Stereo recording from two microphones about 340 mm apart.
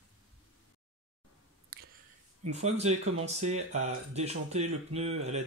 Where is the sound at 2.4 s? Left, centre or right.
Centre.